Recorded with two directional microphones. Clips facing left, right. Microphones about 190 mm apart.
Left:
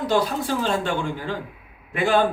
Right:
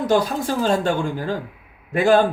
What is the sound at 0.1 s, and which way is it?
A man's voice, 40° right (ahead or behind).